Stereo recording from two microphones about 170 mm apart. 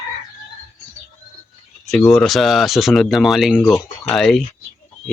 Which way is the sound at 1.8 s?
Centre (ahead or behind).